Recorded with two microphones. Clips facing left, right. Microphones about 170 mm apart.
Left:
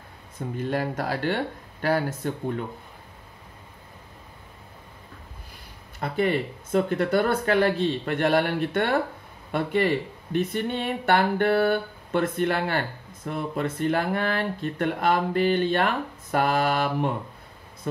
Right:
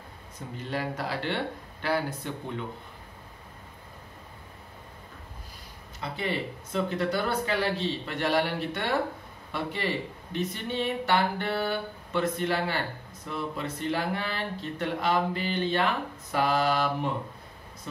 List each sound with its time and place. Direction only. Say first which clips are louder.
0.6 s speech: left 5 dB; 50° left (ahead or behind)
5.9 s speech: left 7 dB; 50° left (ahead or behind)